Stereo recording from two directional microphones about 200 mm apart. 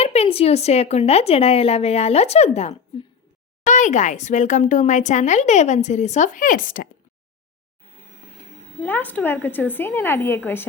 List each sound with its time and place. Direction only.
0.0 s speech: 30° left (ahead or behind)
8.8 s a woman's voice: 10° left (ahead or behind)